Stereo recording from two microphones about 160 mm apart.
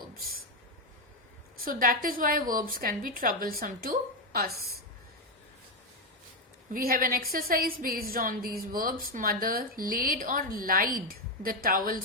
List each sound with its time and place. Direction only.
1.6 s a woman's voice: 60° right (ahead or behind)
6.7 s a woman's voice: 60° right (ahead or behind)